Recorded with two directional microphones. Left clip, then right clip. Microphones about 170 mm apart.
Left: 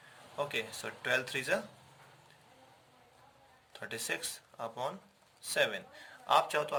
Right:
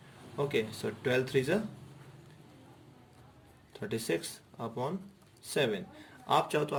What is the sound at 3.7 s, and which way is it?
A man's voice, 30° left (ahead or behind).